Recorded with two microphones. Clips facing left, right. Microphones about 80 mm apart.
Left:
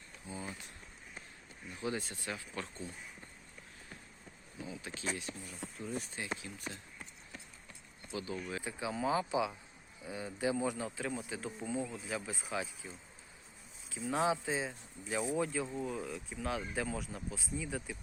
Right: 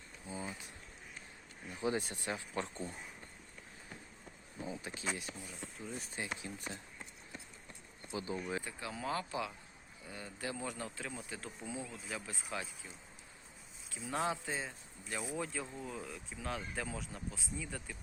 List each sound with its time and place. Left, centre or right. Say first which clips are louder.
0.3 s speech: even; right
1.7 s speech: right 2 dB; right
4.5 s speech: right 1 dB; right
5.5 s a man's voice: left 6 dB; centre
6.2 s speech: right 1 dB; right
7.7 s clip-clop: even; right
8.6 s a man's voice: left 5 dB; centre
13.9 s a man's voice: left 4 dB; centre